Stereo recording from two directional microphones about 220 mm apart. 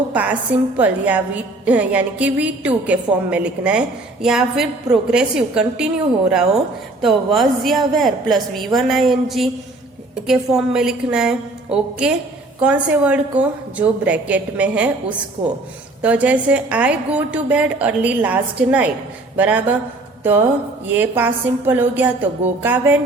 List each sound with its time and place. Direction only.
0.1 s a woman's voice: 5° right (ahead or behind)
16.0 s a woman's voice: 5° right (ahead or behind)
20.9 s a woman's voice: 10° right (ahead or behind)